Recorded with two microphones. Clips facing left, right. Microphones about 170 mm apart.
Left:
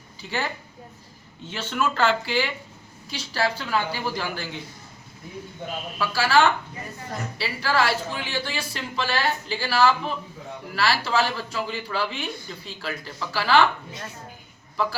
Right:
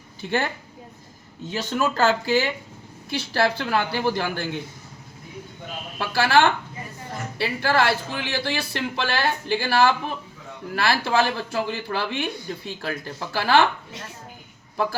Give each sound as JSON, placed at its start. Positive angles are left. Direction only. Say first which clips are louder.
{"t": 0.2, "sound": "speech", "louder": "right 5 dB", "side_deg": -55}
{"t": 1.5, "sound": "speech", "louder": "right 2 dB", "side_deg": -40}
{"t": 3.1, "sound": "speech", "louder": "right 4 dB", "side_deg": -60}
{"t": 6.0, "sound": "a man's voice", "louder": "right 1 dB", "side_deg": -55}